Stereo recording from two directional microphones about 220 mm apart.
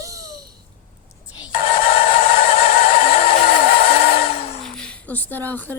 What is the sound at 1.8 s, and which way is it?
Music, 25° left (ahead or behind).